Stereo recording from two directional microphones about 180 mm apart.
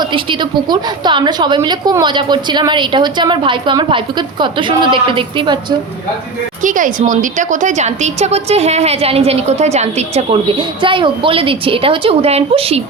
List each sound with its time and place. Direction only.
0.0 s a woman's voice: 25° right (ahead or behind)
6.6 s a woman's voice: 45° right (ahead or behind)
10.6 s a woman's voice: 25° right (ahead or behind)